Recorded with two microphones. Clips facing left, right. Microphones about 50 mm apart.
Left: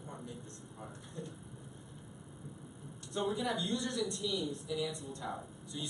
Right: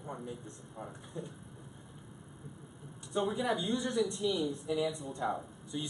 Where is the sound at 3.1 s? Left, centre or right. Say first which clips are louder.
Right 3 dB; centre.